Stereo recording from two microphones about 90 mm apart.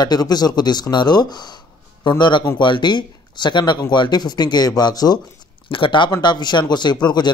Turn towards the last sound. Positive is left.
turn(degrees=55)  # may be behind; listen again after turning